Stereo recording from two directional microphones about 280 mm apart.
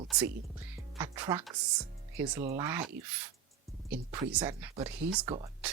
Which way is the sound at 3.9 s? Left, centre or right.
Centre.